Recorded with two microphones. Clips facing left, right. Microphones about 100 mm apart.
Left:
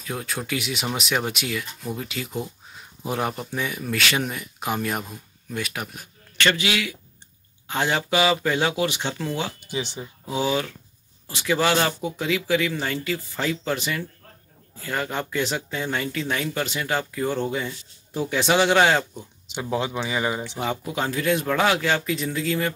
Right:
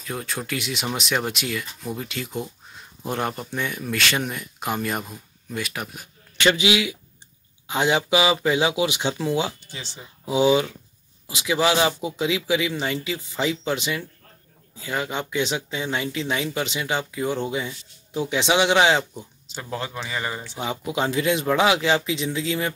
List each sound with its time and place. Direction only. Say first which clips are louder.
0.0 s speech: even; centre (ahead or behind)
6.4 s speech: right 3 dB; 15° right (ahead or behind)
9.7 s speech: left 10 dB; 15° left (ahead or behind)
10.4 s speech: right 6 dB; 15° right (ahead or behind)
19.5 s speech: left 5 dB; 15° left (ahead or behind)
20.8 s speech: right 6 dB; 10° right (ahead or behind)